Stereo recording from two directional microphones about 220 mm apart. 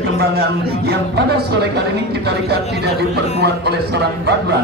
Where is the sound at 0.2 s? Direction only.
45° right (ahead or behind).